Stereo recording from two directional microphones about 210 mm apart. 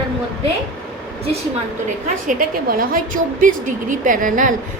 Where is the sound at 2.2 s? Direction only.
40° right (ahead or behind).